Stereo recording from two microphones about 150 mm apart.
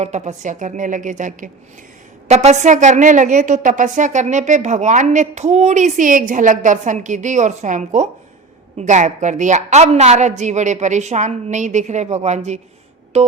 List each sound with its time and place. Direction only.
0.0 s a woman's voice: 50° right (ahead or behind)
2.2 s a woman's voice: 50° right (ahead or behind)